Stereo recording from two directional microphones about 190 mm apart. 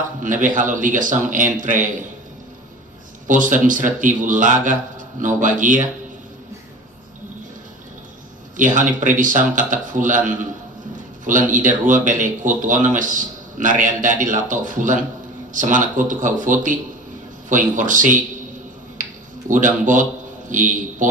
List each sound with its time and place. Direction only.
0.2 s a man's voice: 45° right (ahead or behind)
3.2 s a man's voice: 45° right (ahead or behind)
8.5 s a man's voice: 45° right (ahead or behind)
19.5 s a man's voice: 45° right (ahead or behind)